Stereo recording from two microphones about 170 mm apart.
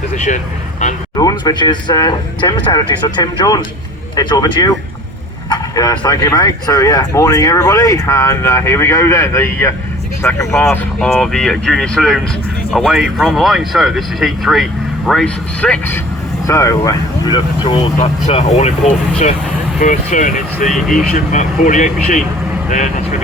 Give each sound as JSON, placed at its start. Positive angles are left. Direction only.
{"t": 0.3, "sound": "speech", "side_deg": 45}
{"t": 1.1, "sound": "speech", "side_deg": 20}
{"t": 11.0, "sound": "speech", "side_deg": 0}
{"t": 16.5, "sound": "speech", "side_deg": 20}
{"t": 18.3, "sound": "speech", "side_deg": 40}
{"t": 20.7, "sound": "speech", "side_deg": 0}
{"t": 21.1, "sound": "speech", "side_deg": 45}